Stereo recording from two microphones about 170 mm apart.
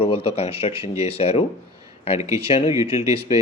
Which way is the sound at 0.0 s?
35° left (ahead or behind).